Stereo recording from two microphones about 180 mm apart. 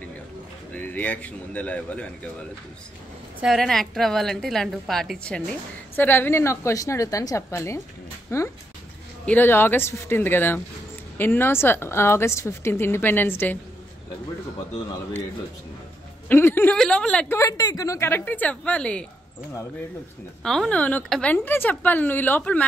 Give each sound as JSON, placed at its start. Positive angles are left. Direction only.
{"t": 0.7, "sound": "a woman's voice", "side_deg": 10}
{"t": 3.3, "sound": "a woman's voice", "side_deg": 0}
{"t": 16.3, "sound": "a woman's voice", "side_deg": 10}
{"t": 17.4, "sound": "a woman's voice", "side_deg": 20}
{"t": 20.4, "sound": "a woman's voice", "side_deg": 5}